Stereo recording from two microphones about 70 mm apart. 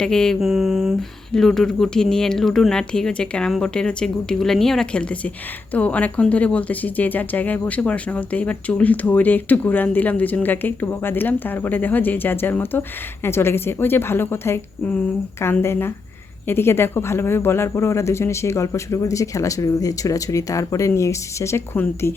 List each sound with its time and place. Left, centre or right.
0.0 s speech: centre
0.3 s a woman's voice: centre; by 14.6 s left
15.6 s a woman's voice: left